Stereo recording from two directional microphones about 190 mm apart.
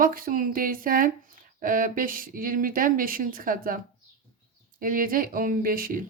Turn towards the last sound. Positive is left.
turn(degrees=-50)  # may be behind; listen again after turning